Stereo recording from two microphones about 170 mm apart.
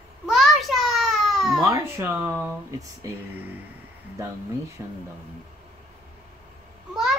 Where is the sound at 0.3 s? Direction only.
Centre (ahead or behind).